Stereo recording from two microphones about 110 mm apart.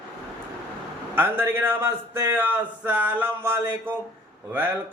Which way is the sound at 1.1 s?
20° right (ahead or behind).